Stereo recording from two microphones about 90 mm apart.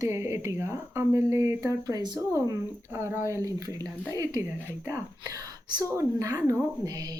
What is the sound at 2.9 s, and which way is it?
Speech, 25° right (ahead or behind).